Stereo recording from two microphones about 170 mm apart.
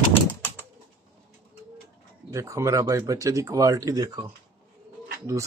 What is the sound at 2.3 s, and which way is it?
Speech, 15° right (ahead or behind).